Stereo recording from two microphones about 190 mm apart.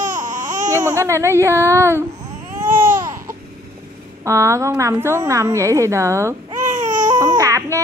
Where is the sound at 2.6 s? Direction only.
10° right (ahead or behind).